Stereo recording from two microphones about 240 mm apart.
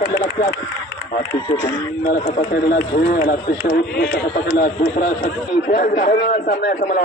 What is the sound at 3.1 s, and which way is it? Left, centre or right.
Speech, left.